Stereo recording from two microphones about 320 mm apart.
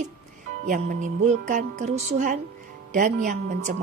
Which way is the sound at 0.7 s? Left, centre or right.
Right.